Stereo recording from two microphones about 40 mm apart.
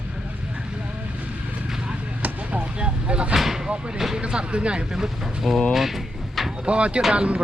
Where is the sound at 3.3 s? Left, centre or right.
Centre.